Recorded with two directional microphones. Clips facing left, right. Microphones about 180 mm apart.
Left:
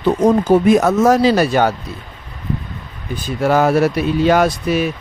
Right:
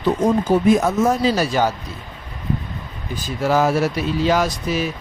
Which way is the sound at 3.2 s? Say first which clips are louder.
Left 3 dB; 60° left (ahead or behind).